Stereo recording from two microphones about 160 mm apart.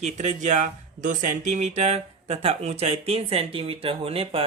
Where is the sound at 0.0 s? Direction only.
45° right (ahead or behind).